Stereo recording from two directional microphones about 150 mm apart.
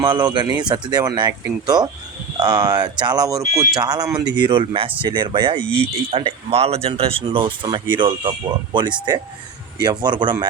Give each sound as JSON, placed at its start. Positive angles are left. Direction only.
{"t": 0.1, "sound": "speech", "side_deg": -25}